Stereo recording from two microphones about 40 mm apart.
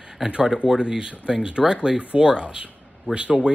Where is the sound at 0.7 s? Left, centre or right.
Centre.